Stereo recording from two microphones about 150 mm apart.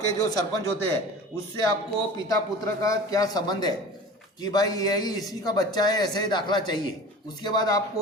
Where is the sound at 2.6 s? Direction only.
20° left (ahead or behind).